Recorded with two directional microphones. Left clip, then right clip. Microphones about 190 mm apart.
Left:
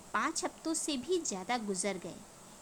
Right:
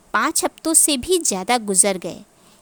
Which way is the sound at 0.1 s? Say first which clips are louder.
Right 14 dB; 55° right (ahead or behind).